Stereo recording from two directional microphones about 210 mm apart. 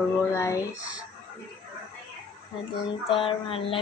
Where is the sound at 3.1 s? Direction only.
25° left (ahead or behind).